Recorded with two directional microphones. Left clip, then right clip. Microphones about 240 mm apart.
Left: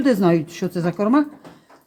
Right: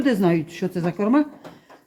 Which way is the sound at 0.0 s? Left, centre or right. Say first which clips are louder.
Left 3 dB; left.